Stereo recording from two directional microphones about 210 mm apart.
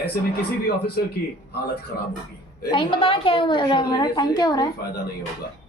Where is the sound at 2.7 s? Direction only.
25° left (ahead or behind).